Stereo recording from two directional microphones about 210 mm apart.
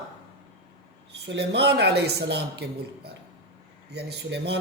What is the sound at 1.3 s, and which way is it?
A man's voice, 55° right (ahead or behind).